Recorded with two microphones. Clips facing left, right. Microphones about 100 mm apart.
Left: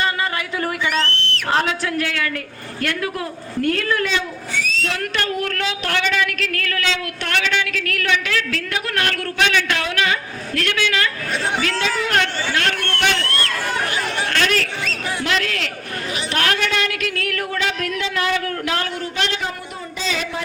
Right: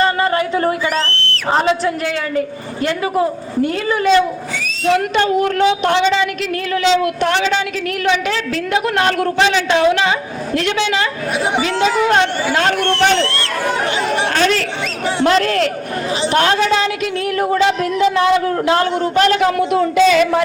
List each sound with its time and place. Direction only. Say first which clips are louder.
0.0 s speech: right 7 dB; 35° right (ahead or behind)
3.7 s a woman's voice: right 5 dB; 15° right (ahead or behind); by 18.9 s 30° right (ahead or behind)
19.1 s speech: right 12 dB; 45° right (ahead or behind)
19.4 s speech: right 14 dB; 85° right; by 20.4 s 65° right (ahead or behind)